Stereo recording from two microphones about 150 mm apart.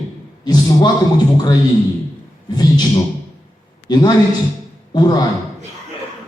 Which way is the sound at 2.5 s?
30° left (ahead or behind).